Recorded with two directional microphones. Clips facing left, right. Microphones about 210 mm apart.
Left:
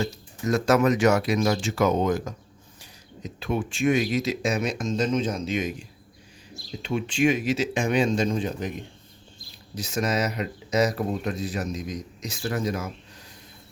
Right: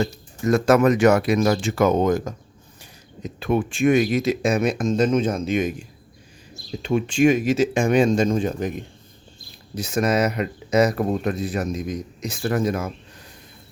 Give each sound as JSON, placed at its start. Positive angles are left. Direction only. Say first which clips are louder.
{"t": 0.0, "sound": "speech", "louder": "right 5 dB", "side_deg": -55}
{"t": 6.8, "sound": "speech", "louder": "right 5 dB", "side_deg": -45}